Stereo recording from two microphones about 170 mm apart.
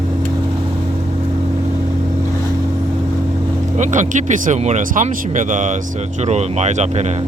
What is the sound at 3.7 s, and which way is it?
Speech, 45° right (ahead or behind).